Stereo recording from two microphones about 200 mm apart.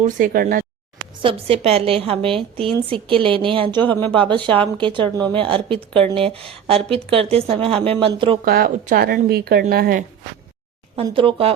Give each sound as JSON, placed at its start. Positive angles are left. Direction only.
{"t": 0.0, "sound": "speech", "side_deg": -40}
{"t": 1.2, "sound": "a woman's voice", "side_deg": -30}
{"t": 8.4, "sound": "speech", "side_deg": -50}
{"t": 10.9, "sound": "a woman's voice", "side_deg": -25}